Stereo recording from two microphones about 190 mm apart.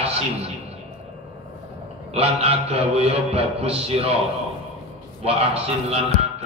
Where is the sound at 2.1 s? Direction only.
30° right (ahead or behind).